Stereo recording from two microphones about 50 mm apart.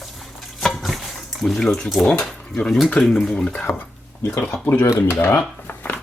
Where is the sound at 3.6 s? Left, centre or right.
Left.